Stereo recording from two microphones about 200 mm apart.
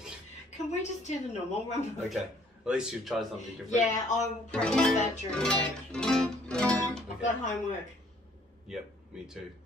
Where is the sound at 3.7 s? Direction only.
35° left (ahead or behind).